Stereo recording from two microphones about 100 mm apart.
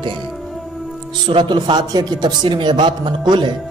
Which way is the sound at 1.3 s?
50° right (ahead or behind).